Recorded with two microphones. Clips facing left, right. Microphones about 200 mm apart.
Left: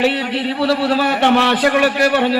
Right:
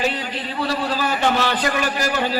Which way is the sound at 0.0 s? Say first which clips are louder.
Left 7 dB; 70° left (ahead or behind).